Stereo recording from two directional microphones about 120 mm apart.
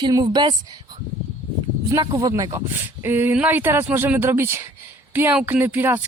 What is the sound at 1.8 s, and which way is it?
Speech, 35° right (ahead or behind).